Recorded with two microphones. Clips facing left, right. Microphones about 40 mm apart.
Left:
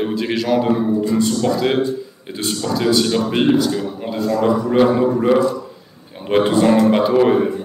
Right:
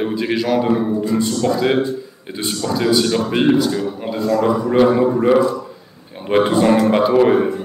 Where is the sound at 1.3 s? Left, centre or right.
Right.